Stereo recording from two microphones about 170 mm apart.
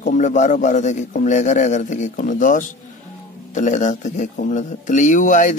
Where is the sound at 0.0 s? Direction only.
45° left (ahead or behind).